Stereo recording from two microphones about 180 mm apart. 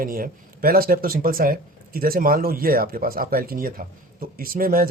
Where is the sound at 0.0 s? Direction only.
55° right (ahead or behind).